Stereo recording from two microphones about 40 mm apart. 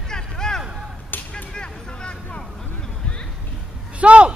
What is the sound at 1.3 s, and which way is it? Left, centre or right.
Vehicle, left.